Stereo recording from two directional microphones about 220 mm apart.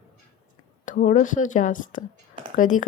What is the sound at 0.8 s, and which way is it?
A woman's voice, 35° left (ahead or behind).